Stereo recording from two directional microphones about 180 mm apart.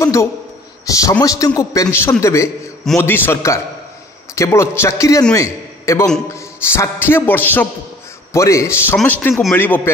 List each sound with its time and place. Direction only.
0.0 s a man's voice: 15° left (ahead or behind)